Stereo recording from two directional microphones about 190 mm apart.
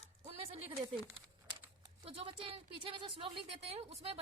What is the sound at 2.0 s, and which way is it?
A woman's voice, 30° right (ahead or behind).